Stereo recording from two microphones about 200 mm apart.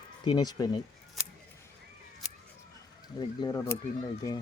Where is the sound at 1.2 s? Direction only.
Centre (ahead or behind).